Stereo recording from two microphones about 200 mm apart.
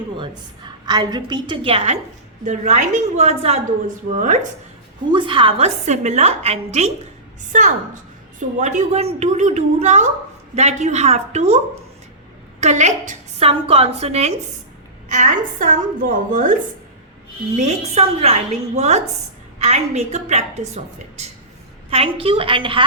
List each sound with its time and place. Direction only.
0.9 s a woman's voice: 20° right (ahead or behind); by 4.4 s 40° right (ahead or behind)
5.1 s a woman's voice: 25° right (ahead or behind); by 16.6 s 40° right (ahead or behind)
17.6 s a woman's voice: 30° right (ahead or behind)